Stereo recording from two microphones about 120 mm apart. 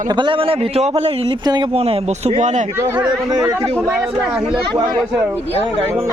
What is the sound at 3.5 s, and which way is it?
Speech, 25° right (ahead or behind).